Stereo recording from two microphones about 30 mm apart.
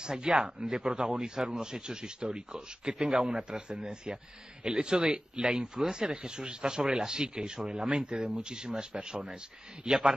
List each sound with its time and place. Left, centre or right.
0.0 s a man's voice: right
9.8 s a man's voice: centre